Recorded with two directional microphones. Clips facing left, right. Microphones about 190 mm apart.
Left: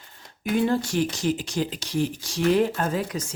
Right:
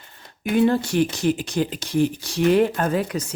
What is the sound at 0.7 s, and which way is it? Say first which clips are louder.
Speech: right 4 dB; 60° right (ahead or behind).